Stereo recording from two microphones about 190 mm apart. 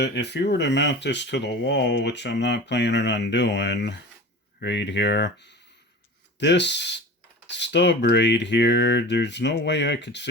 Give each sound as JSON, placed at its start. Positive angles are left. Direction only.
{"t": 0.0, "sound": "speech", "side_deg": 65}